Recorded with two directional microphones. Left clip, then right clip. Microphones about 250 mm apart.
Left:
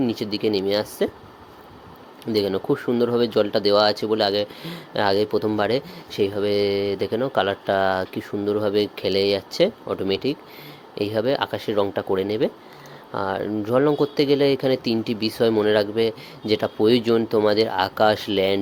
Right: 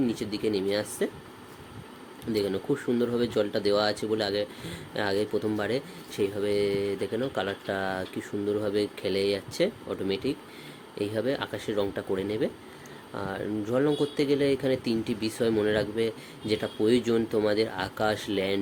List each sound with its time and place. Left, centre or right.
0.0 s speech: centre
2.3 s speech: centre